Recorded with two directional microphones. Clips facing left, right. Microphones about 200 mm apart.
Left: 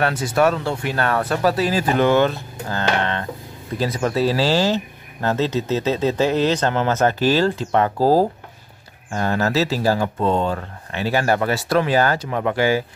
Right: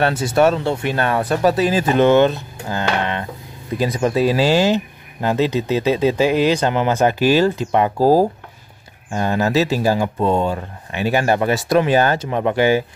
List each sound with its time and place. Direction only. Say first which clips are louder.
0.0 s speech: right 3 dB; 25° right (ahead or behind)